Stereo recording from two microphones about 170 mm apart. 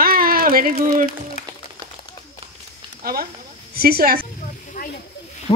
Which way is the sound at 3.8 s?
60° right (ahead or behind).